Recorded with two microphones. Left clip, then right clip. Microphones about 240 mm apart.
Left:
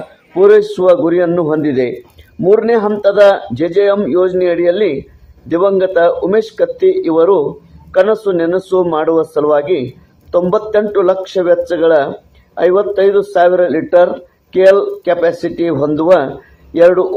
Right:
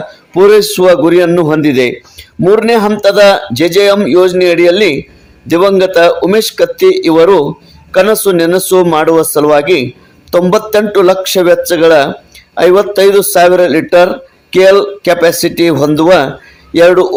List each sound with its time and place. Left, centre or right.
0.3 s a man's voice: right